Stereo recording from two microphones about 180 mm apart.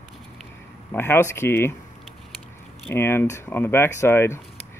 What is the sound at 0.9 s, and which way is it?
Speech, 15° left (ahead or behind).